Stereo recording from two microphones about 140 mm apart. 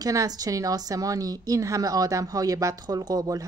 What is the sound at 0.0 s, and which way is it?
A woman's voice, 25° right (ahead or behind).